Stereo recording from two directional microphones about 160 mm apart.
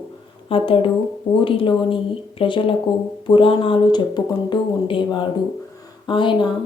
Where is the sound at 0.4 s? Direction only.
35° left (ahead or behind).